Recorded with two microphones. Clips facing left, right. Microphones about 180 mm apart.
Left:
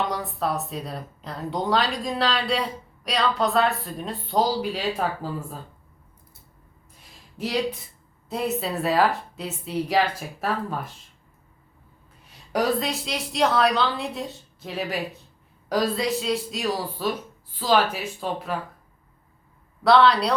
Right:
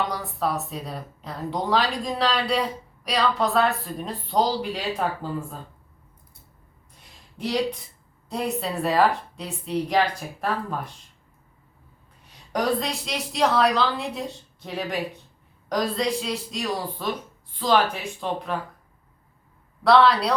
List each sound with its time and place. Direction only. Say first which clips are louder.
0.1 s a woman's voice: even; centre (ahead or behind)
8.3 s a woman's voice: left 1 dB; centre (ahead or behind)
12.5 s a woman's voice: left 1 dB; centre (ahead or behind)
19.8 s a woman's voice: even; centre (ahead or behind)